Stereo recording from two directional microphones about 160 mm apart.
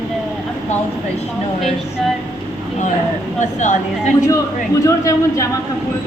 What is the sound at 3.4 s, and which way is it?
Speech, 50° left (ahead or behind).